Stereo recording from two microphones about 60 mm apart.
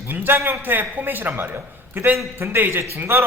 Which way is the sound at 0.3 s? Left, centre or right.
Right.